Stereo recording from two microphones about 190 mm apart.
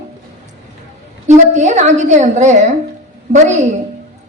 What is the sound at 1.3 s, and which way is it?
A woman's voice, 40° right (ahead or behind).